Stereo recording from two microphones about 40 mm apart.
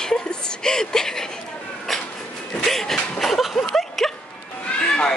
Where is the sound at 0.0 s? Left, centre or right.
Centre.